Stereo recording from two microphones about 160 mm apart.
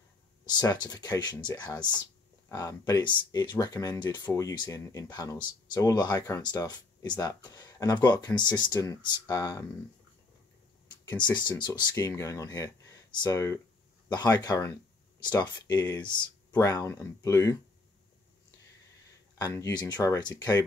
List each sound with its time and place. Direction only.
0.5 s speech: 25° left (ahead or behind)
11.3 s speech: 25° left (ahead or behind)
19.3 s speech: 20° left (ahead or behind)